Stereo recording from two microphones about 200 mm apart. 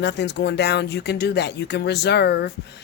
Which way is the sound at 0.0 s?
60° left (ahead or behind).